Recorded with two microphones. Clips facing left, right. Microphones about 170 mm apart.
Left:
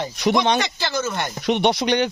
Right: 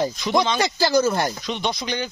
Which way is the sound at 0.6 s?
40° right (ahead or behind).